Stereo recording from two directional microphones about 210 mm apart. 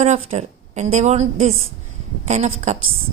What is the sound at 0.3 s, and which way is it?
A woman's voice, 35° right (ahead or behind).